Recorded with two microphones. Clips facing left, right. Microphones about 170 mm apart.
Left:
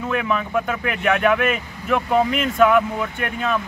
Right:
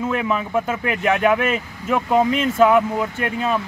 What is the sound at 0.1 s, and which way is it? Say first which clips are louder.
Speech: left 3 dB; 25° right (ahead or behind).